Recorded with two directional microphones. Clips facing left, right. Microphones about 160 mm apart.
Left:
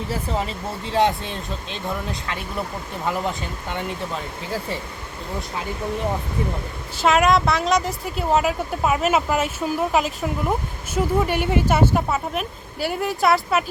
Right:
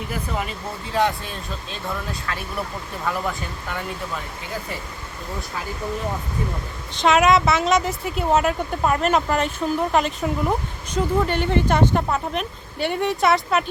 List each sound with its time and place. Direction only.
0.1 s speech: 30° left (ahead or behind)
6.9 s speech: centre (ahead or behind)